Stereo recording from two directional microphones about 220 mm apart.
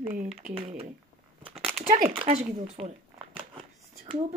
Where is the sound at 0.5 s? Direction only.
30° right (ahead or behind).